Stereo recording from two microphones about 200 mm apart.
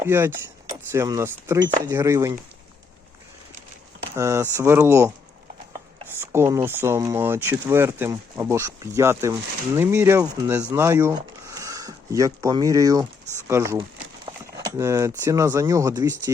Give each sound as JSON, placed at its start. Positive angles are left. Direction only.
{"t": 0.0, "sound": "speech", "side_deg": -10}
{"t": 4.1, "sound": "speech", "side_deg": -15}
{"t": 6.1, "sound": "speech", "side_deg": -15}
{"t": 11.1, "sound": "a sound", "side_deg": -15}
{"t": 13.5, "sound": "speech", "side_deg": -15}